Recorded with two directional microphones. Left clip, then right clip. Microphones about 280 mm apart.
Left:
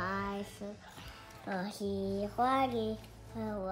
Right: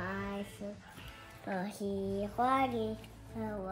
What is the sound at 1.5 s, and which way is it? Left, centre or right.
Child singing, centre.